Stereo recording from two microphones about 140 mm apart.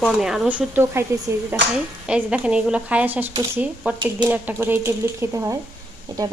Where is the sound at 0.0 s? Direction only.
Centre (ahead or behind).